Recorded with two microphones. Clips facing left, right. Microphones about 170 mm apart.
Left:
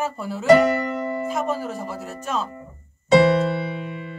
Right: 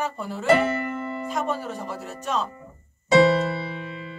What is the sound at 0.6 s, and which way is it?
Music, 40° left (ahead or behind).